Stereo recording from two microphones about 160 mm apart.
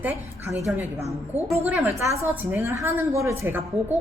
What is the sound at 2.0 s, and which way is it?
A woman's voice, 20° right (ahead or behind).